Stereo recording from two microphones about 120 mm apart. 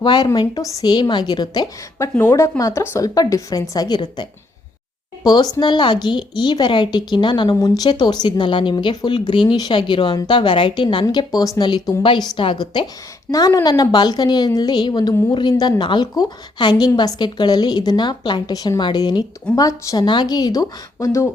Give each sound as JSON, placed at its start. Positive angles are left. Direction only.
{"t": 0.0, "sound": "speech", "side_deg": 40}
{"t": 2.0, "sound": "a woman's voice", "side_deg": 20}
{"t": 7.5, "sound": "speech", "side_deg": 30}
{"t": 13.3, "sound": "a woman's voice", "side_deg": 30}